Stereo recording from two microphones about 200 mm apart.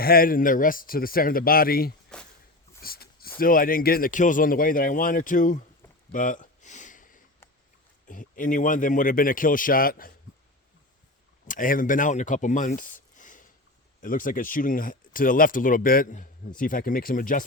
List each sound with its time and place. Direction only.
0.0 s speech: 45° left (ahead or behind)
2.1 s a sound: 5° left (ahead or behind)
2.8 s speech: 50° left (ahead or behind)
6.1 s a sound: 40° left (ahead or behind)
8.0 s speech: 40° left (ahead or behind)
11.4 s speech: 40° left (ahead or behind)